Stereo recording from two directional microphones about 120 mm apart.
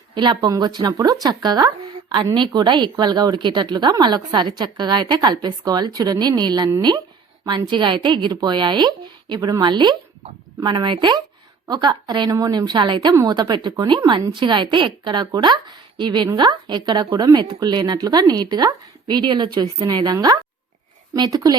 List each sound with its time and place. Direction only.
0.1 s a woman's voice: 40° right (ahead or behind)